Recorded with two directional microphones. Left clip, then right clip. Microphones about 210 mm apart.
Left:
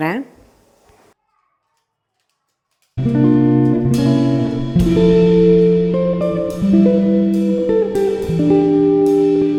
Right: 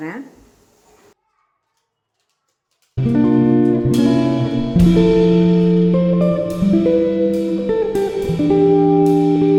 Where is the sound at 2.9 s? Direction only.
Centre (ahead or behind).